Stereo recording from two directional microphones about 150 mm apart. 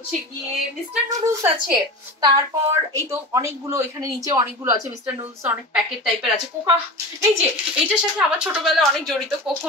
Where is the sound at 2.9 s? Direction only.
20° right (ahead or behind).